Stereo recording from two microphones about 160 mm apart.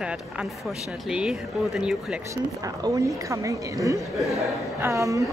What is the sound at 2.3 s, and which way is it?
Speech, 20° right (ahead or behind).